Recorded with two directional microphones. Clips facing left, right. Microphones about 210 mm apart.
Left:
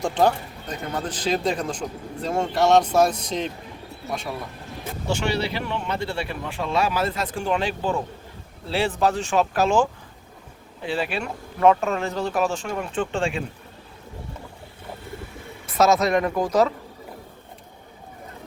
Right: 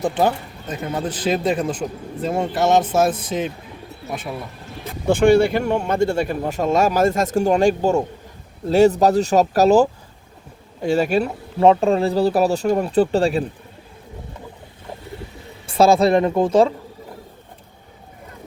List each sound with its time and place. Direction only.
0.0 s speech: 5° right (ahead or behind)
5.0 s speech: 50° right (ahead or behind)
11.6 s speech: 30° right (ahead or behind)
15.6 s speech: 30° right (ahead or behind)